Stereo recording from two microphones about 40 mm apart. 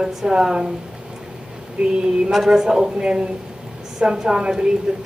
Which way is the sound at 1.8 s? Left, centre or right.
Right.